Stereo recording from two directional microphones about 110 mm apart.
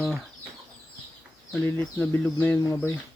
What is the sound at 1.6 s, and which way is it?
Speech, 20° left (ahead or behind).